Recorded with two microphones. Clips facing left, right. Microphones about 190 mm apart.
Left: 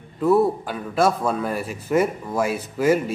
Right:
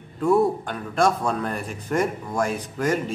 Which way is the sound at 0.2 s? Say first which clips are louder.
Left 2 dB; 5° left (ahead or behind).